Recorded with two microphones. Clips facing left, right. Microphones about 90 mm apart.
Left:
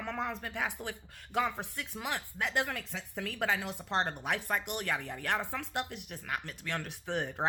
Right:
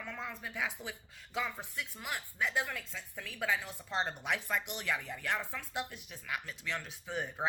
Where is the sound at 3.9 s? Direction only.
60° left (ahead or behind).